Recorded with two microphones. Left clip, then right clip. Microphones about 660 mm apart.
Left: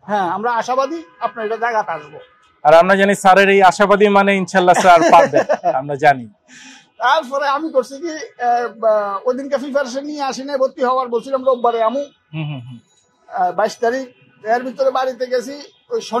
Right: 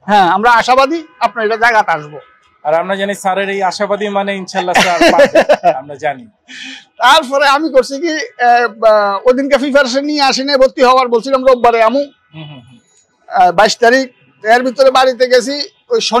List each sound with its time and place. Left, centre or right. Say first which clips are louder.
0.0 s speech: right 9 dB; right
2.6 s a man's voice: left 4 dB; left
5.0 s speech: right 3 dB; right
5.8 s a man's voice: left 5 dB; left
6.5 s speech: right 12 dB; right
13.3 s speech: right 9 dB; right